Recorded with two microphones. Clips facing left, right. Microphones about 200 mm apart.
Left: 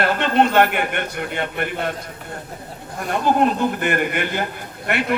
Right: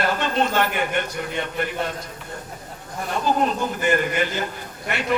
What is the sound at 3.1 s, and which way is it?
A man's voice, 60° left (ahead or behind).